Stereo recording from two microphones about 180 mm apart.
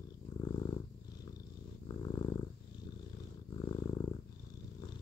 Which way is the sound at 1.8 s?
25° left (ahead or behind).